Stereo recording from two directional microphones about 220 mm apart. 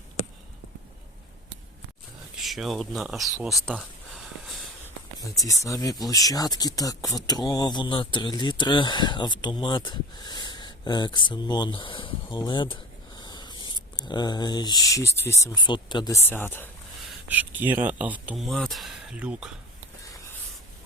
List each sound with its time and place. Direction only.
2.3 s speech: centre (ahead or behind)
3.3 s a sound: centre (ahead or behind)
5.4 s speech: 15° left (ahead or behind); by 19.5 s 5° right (ahead or behind)